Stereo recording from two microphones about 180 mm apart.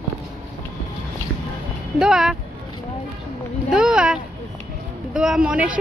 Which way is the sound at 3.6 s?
5° right (ahead or behind).